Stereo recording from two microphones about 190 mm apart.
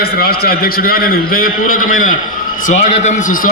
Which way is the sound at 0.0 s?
55° left (ahead or behind).